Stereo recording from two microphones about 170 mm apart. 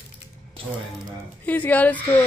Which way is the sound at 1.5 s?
10° left (ahead or behind).